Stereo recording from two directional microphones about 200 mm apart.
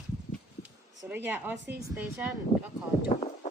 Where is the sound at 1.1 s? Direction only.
10° right (ahead or behind).